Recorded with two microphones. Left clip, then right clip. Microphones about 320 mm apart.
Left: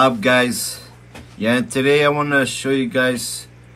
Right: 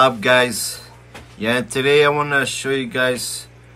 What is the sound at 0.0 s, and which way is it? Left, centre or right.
Speech, centre.